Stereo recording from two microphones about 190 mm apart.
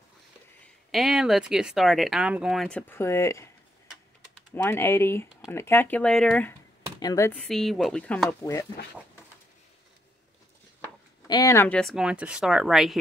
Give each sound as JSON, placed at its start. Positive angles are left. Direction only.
{"t": 0.9, "sound": "speech", "side_deg": 0}
{"t": 2.9, "sound": "speech", "side_deg": 15}
{"t": 4.6, "sound": "speech", "side_deg": 10}
{"t": 7.0, "sound": "speech", "side_deg": 15}
{"t": 7.3, "sound": "speech", "side_deg": 0}
{"t": 11.2, "sound": "speech", "side_deg": 20}
{"t": 11.8, "sound": "speech", "side_deg": -5}